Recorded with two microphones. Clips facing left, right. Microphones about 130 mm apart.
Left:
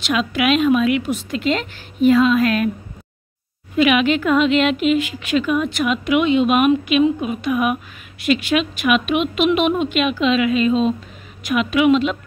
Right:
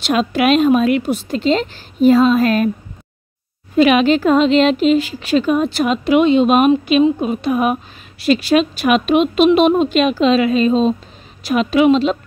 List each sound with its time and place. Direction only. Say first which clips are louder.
0.0 s speech: right 4 dB; 35° right (ahead or behind)
3.7 s speech: right 4 dB; 35° right (ahead or behind)